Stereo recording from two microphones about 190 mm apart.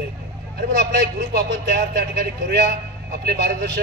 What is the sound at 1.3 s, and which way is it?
Speech, 55° right (ahead or behind).